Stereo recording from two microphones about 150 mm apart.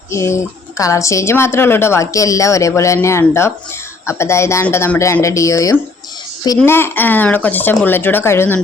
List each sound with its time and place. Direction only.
0.1 s speech: 20° left (ahead or behind)